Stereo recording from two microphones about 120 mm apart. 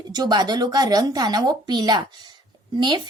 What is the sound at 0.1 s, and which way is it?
A woman's voice, 35° right (ahead or behind).